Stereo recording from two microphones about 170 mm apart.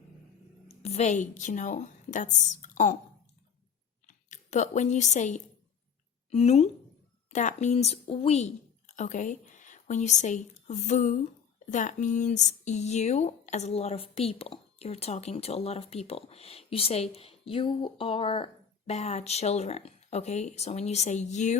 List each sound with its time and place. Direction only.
0.8 s a woman's voice: 40° left (ahead or behind)
4.0 s speech: 45° left (ahead or behind)